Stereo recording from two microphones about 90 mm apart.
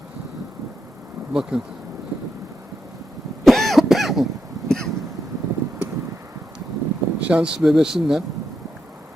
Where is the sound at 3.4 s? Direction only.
Centre (ahead or behind).